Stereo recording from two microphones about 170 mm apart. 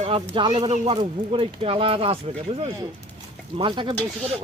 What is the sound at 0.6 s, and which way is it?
Speech, 30° right (ahead or behind).